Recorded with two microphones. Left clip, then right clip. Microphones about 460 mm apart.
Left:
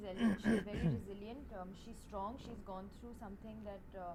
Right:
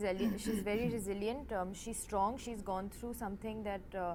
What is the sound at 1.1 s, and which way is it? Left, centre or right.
A woman's voice, right.